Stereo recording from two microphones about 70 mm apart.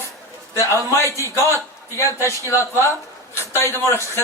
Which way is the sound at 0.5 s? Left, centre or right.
Left.